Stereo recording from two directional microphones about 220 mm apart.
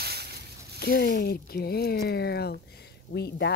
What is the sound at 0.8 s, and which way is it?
Speech, 45° left (ahead or behind).